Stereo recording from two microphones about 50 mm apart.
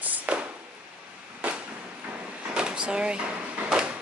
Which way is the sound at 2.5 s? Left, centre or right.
Centre.